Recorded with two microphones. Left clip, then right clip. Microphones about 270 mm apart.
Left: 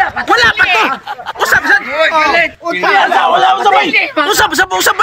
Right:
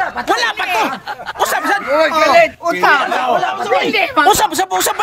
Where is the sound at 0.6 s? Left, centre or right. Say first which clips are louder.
Left 6 dB; centre.